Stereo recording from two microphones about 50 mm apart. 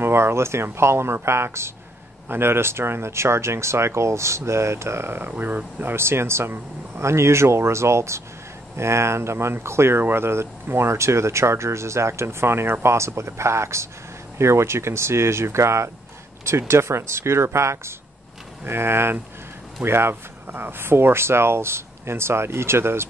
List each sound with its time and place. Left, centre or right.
0.0 s speech: right
2.2 s speech: right
5.3 s speech: right
18.6 s speech: right